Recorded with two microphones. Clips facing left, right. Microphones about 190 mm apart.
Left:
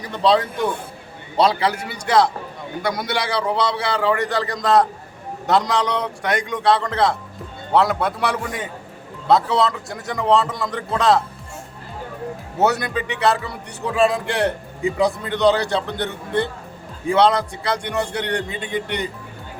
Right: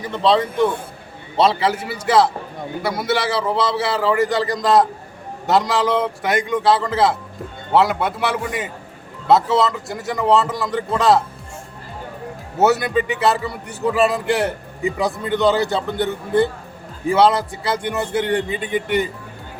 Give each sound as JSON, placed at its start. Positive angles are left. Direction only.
{"t": 0.0, "sound": "a man's voice", "side_deg": 0}
{"t": 12.5, "sound": "a man's voice", "side_deg": 0}